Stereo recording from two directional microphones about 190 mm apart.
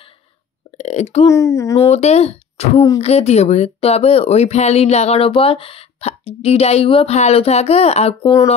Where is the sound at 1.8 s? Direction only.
35° left (ahead or behind).